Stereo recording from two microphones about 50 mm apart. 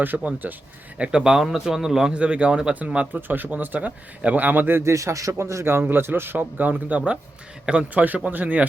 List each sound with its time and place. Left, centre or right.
0.1 s a man's voice: centre
0.9 s speech: right
1.2 s a man's voice: centre
2.1 s speech: right
3.2 s speech: right
4.8 s a man's voice: right
5.8 s speech: right; by 8.0 s centre
8.0 s speech: right